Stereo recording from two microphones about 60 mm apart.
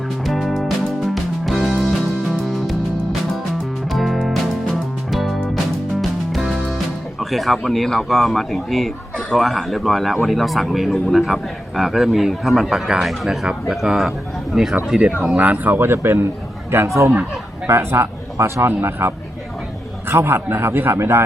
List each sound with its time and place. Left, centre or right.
0.3 s music: centre
3.9 s music: centre
7.2 s a man's voice: centre
15.4 s a man's voice: right